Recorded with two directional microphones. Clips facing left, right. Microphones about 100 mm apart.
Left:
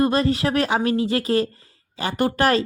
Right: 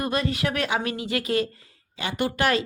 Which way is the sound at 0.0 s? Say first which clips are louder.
Left 6 dB; 35° left (ahead or behind).